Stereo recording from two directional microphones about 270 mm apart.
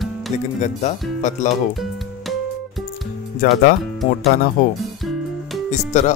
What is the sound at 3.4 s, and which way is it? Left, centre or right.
Speech, left.